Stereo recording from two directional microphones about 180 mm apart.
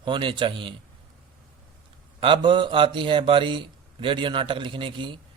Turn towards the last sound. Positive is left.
turn(degrees=-25)  # may be behind; listen again after turning